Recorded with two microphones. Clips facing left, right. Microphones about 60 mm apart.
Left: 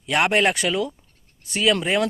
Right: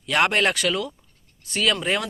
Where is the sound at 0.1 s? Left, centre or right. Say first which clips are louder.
Left 1 dB; centre.